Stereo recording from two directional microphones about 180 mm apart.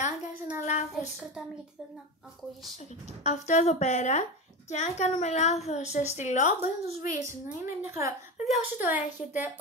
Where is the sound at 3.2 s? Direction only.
40° left (ahead or behind).